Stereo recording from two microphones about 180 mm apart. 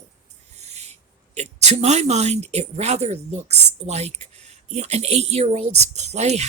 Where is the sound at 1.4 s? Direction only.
40° right (ahead or behind).